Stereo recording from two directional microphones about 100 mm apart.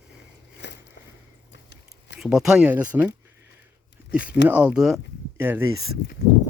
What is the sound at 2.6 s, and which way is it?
Speech, 15° right (ahead or behind).